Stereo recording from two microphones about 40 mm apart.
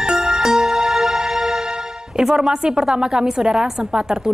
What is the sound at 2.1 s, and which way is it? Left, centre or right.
A woman's voice, centre.